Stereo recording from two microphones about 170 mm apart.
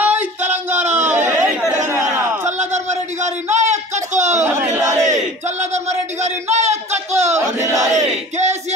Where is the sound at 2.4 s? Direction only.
45° right (ahead or behind).